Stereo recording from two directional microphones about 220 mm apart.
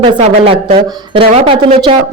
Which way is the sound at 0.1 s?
25° right (ahead or behind).